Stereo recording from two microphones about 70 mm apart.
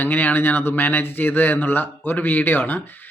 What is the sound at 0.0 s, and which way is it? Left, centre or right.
Speech, left.